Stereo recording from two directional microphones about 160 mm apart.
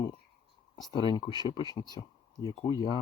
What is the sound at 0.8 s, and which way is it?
Speech, 25° left (ahead or behind).